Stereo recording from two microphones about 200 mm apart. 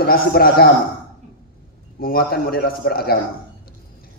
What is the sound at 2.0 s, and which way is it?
A man's voice, 50° left (ahead or behind).